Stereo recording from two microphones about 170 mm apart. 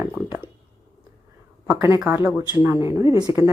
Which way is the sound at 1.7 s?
10° right (ahead or behind).